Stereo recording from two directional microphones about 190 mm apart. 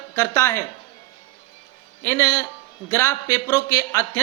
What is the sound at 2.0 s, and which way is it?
Speech, 15° left (ahead or behind).